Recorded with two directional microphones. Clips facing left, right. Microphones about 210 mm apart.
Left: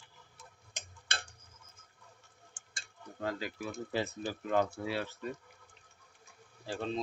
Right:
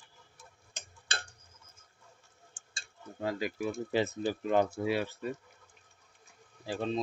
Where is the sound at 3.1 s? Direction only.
15° right (ahead or behind).